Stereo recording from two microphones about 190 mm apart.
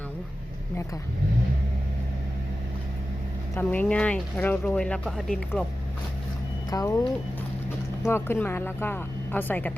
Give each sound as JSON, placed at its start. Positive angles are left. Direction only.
{"t": 3.5, "sound": "speech", "side_deg": 10}
{"t": 6.7, "sound": "speech", "side_deg": 15}